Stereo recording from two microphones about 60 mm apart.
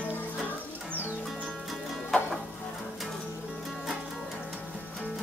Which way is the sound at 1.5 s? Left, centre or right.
Centre.